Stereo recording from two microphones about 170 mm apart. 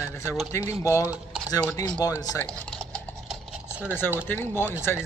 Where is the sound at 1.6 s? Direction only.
10° left (ahead or behind).